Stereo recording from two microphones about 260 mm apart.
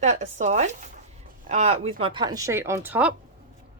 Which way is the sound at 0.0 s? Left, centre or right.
Right.